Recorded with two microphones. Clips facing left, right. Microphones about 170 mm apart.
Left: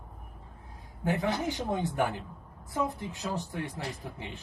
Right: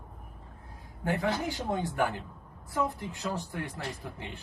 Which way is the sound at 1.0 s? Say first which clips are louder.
Left 1 dB; 20° left (ahead or behind).